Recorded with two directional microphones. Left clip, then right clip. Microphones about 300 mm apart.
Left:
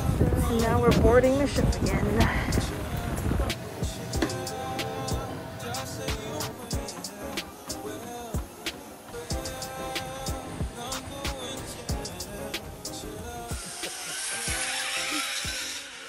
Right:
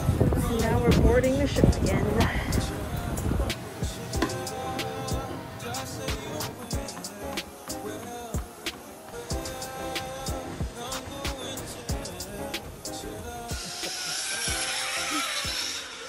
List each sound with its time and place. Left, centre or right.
0.0 s a sound: centre
1.5 s vehicle: centre
2.6 s music: centre
9.3 s music: centre
15.5 s music: centre